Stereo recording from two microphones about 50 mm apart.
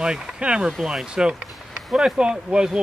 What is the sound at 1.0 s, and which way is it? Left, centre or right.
Speech, centre.